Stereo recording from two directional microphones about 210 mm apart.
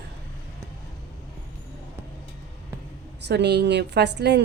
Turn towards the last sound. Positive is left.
turn(degrees=-55)  # may be behind; listen again after turning